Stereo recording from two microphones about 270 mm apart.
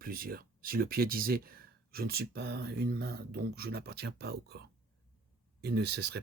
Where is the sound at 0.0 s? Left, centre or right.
Right.